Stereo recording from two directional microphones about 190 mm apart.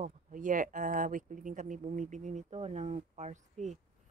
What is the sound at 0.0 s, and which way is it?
Speech, 45° right (ahead or behind).